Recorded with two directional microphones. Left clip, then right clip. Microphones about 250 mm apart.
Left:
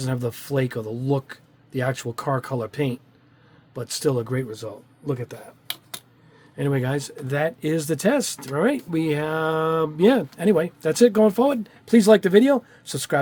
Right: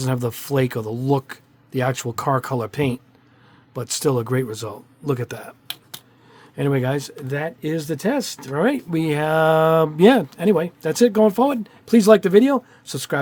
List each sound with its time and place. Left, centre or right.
0.0 s speech: right
6.6 s speech: centre
7.3 s speech: centre